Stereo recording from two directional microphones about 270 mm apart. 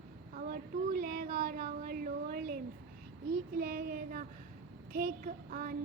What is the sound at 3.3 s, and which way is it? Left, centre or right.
Child singing, right.